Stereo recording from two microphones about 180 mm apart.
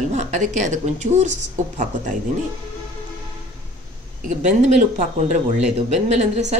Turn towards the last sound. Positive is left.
turn(degrees=-40)  # may be behind; listen again after turning